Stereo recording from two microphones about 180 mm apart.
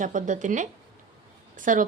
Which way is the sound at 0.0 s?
45° right (ahead or behind).